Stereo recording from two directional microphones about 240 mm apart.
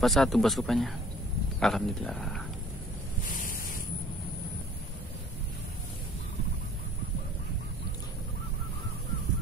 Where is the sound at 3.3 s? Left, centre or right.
Left.